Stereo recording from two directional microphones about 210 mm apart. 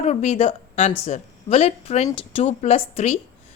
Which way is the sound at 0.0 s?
30° left (ahead or behind).